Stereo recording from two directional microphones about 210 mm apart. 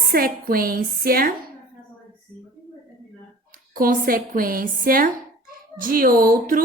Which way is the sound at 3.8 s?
40° right (ahead or behind).